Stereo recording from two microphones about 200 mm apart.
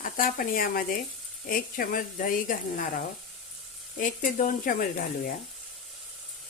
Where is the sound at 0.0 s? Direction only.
45° left (ahead or behind).